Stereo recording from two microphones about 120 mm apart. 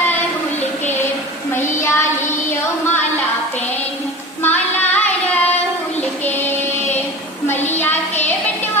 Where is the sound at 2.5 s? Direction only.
20° left (ahead or behind).